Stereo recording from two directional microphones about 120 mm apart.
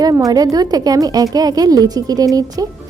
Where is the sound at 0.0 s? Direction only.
30° right (ahead or behind).